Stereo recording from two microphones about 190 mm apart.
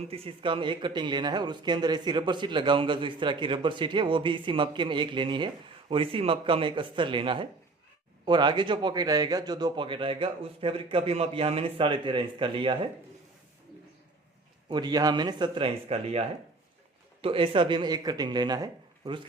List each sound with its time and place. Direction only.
0.1 s a man's voice: 30° right (ahead or behind)
14.7 s a man's voice: 20° right (ahead or behind)